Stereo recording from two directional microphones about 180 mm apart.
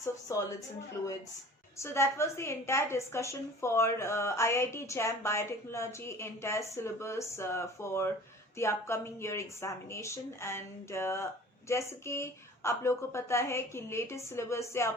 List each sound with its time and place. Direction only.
0.0 s a woman's voice: 20° left (ahead or behind)
1.8 s a woman's voice: 15° left (ahead or behind)